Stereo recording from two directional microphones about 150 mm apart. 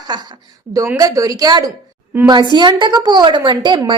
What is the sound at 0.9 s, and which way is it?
A woman's voice, 25° right (ahead or behind).